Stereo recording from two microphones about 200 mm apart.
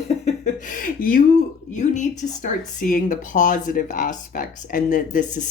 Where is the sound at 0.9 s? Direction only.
45° left (ahead or behind).